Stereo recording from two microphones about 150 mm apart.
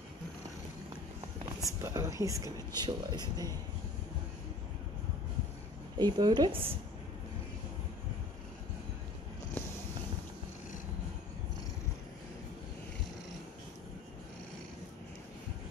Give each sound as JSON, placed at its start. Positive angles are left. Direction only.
{"t": 1.6, "sound": "speech", "side_deg": -20}
{"t": 5.9, "sound": "speech", "side_deg": -30}